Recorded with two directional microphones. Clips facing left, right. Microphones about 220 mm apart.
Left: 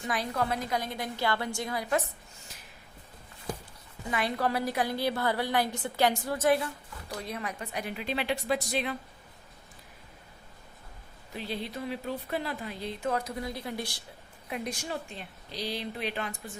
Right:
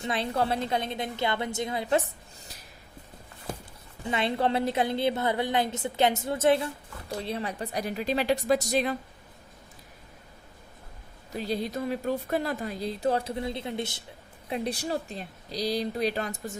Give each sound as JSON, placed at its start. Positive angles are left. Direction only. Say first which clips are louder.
{"t": 0.0, "sound": "a woman's voice", "louder": "right 3 dB", "side_deg": -25}
{"t": 4.0, "sound": "a woman's voice", "louder": "right 3 dB", "side_deg": -25}
{"t": 11.3, "sound": "speech", "louder": "right 5 dB", "side_deg": -40}
{"t": 14.5, "sound": "speech", "louder": "right 5 dB", "side_deg": -35}